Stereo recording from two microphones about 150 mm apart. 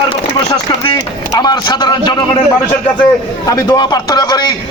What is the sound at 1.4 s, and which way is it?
Speech, 30° left (ahead or behind).